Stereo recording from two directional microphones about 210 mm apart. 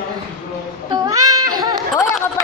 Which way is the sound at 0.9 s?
15° right (ahead or behind).